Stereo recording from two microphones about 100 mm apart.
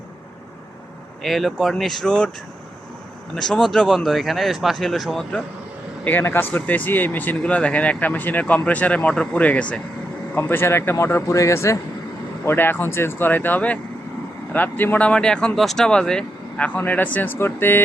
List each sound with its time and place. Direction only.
1.2 s speech: centre (ahead or behind)
3.3 s speech: 5° left (ahead or behind)
6.1 s speech: 20° left (ahead or behind)
10.3 s speech: 20° left (ahead or behind)